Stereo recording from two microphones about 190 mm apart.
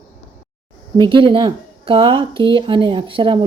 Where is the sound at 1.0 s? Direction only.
25° right (ahead or behind).